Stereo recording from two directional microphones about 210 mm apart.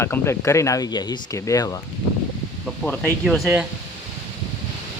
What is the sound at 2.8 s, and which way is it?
Speech, 5° left (ahead or behind).